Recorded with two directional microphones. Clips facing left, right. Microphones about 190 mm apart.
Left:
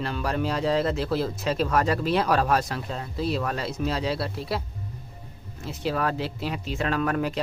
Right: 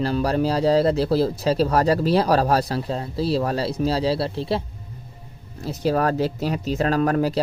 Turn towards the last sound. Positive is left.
turn(degrees=-35)  # may be behind; listen again after turning